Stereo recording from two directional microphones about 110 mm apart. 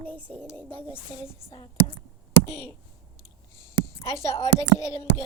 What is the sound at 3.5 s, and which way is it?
Speech, 25° left (ahead or behind).